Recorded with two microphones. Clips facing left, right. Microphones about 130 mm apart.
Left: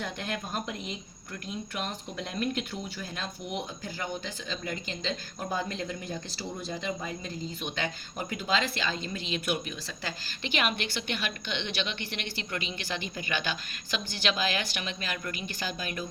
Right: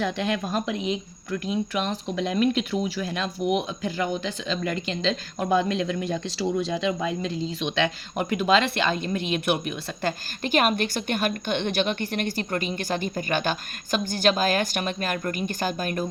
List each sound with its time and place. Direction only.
0.0 s speech: 90° right; by 16.0 s 50° right (ahead or behind)